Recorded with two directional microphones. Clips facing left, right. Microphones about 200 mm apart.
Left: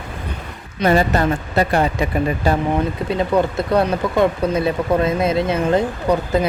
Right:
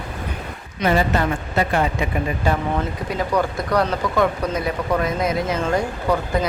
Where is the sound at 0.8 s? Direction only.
40° left (ahead or behind).